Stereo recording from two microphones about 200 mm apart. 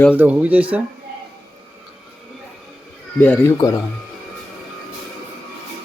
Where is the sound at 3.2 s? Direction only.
10° left (ahead or behind).